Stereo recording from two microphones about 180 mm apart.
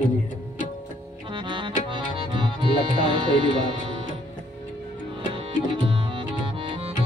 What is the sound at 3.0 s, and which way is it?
Speech, 25° right (ahead or behind).